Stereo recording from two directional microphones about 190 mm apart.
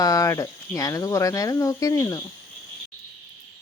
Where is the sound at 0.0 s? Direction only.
20° left (ahead or behind).